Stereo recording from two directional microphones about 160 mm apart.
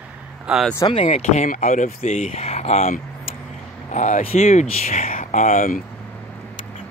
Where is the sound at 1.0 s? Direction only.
45° left (ahead or behind).